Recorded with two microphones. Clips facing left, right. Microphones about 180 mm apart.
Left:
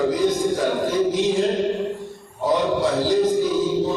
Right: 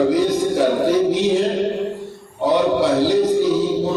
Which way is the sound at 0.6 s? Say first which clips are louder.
Right 5 dB; 70° right (ahead or behind).